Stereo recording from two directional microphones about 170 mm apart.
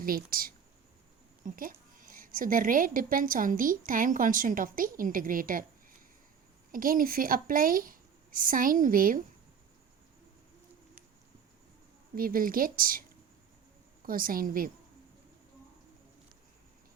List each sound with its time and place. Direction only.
0.0 s a woman's voice: 60° right (ahead or behind)
6.7 s speech: 55° right (ahead or behind)
12.1 s speech: 55° right (ahead or behind)